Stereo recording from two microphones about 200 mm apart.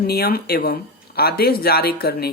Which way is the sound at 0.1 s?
50° left (ahead or behind).